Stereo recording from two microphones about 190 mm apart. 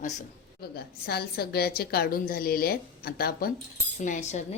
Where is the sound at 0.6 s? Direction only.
55° left (ahead or behind).